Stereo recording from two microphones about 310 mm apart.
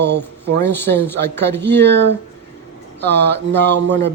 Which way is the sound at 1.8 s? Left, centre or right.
Right.